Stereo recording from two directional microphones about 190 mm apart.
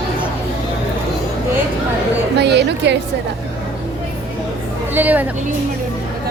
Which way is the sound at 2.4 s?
65° right (ahead or behind).